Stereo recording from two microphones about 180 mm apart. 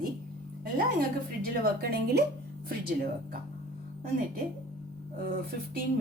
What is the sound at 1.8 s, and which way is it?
Speech, 60° right (ahead or behind).